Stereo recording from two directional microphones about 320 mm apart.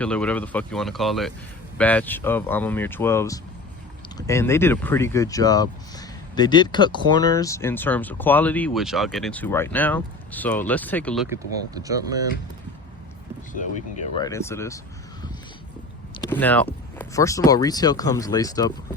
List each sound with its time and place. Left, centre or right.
0.0 s speech: centre
11.8 s speech: centre
13.5 s speech: left
14.2 s speech: centre
16.1 s speech: centre